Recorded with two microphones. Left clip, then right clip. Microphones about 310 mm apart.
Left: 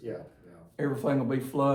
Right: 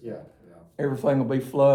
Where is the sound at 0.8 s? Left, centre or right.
Right.